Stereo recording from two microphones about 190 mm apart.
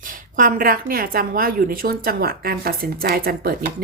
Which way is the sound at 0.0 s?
45° right (ahead or behind).